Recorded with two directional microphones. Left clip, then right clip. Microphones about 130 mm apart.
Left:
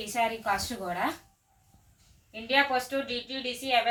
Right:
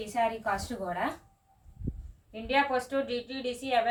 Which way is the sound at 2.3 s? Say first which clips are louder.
Left 2 dB; 30° right (ahead or behind).